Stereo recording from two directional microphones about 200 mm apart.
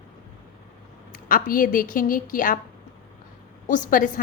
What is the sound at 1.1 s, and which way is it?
A woman's voice, 45° left (ahead or behind).